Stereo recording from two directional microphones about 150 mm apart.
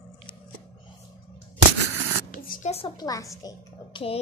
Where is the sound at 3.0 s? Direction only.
25° left (ahead or behind).